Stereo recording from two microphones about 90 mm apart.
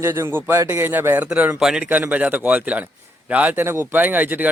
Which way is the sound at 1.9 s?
20° right (ahead or behind).